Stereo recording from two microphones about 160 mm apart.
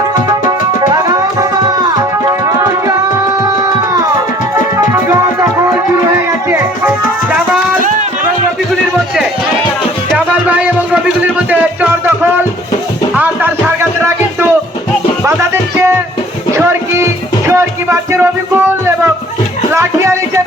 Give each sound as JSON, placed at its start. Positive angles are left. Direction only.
{"t": 0.8, "sound": "music", "side_deg": -25}
{"t": 5.0, "sound": "music", "side_deg": -20}
{"t": 7.8, "sound": "music", "side_deg": -55}
{"t": 10.2, "sound": "music", "side_deg": -10}
{"t": 13.1, "sound": "music", "side_deg": -10}
{"t": 16.5, "sound": "music", "side_deg": -15}